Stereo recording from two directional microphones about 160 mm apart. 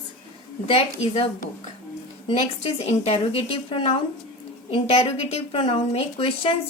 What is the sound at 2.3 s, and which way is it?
A woman's voice, 35° left (ahead or behind).